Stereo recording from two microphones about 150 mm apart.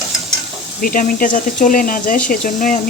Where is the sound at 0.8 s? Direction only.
70° left (ahead or behind).